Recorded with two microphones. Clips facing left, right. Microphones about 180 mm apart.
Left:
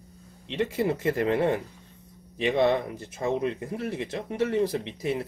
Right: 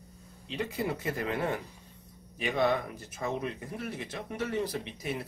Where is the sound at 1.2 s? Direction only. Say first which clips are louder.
Left 6 dB; 30° left (ahead or behind).